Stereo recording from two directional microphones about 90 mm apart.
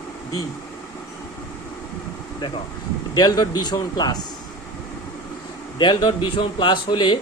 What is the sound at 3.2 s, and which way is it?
A man's voice, 50° left (ahead or behind).